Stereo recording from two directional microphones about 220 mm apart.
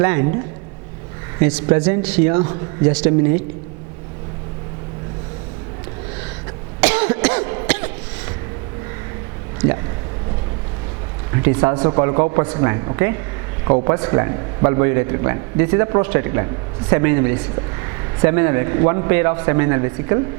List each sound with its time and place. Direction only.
0.0 s a man's voice: 15° right (ahead or behind)
6.8 s cough: 10° right (ahead or behind)
11.3 s a man's voice: 15° right (ahead or behind)